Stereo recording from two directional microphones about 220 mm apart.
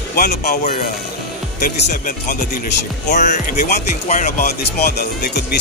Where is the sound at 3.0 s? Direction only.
35° left (ahead or behind).